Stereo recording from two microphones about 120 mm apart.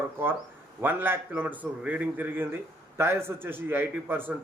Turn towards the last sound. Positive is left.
turn(degrees=-15)  # may be behind; listen again after turning